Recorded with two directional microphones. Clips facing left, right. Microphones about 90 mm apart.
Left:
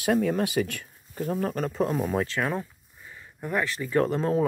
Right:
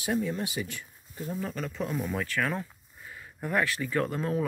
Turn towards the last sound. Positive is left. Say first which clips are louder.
# left 5 dB
turn(degrees=30)  # may be behind; listen again after turning